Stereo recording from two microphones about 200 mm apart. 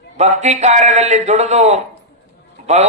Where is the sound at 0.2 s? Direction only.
35° right (ahead or behind).